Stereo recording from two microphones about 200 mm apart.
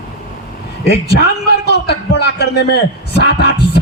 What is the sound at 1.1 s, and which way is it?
A man's voice, 55° left (ahead or behind).